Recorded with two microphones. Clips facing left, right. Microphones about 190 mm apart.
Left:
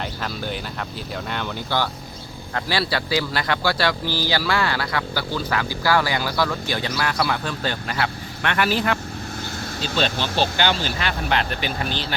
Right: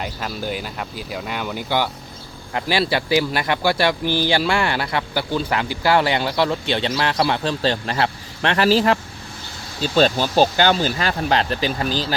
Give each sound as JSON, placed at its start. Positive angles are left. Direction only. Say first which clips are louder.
{"t": 0.0, "sound": "a man's voice", "louder": "right 2 dB", "side_deg": -10}
{"t": 9.9, "sound": "speech", "louder": "right 7 dB", "side_deg": -45}